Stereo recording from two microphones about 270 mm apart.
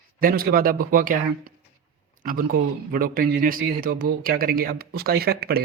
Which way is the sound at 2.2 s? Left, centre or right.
Right.